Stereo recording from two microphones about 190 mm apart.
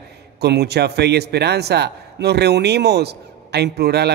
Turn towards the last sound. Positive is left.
turn(degrees=-60)  # may be behind; listen again after turning